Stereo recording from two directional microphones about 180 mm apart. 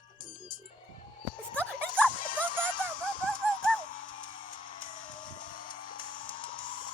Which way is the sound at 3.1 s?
25° left (ahead or behind).